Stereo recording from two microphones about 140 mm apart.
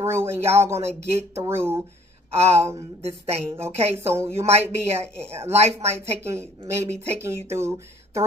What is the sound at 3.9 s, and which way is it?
Speech, 20° right (ahead or behind).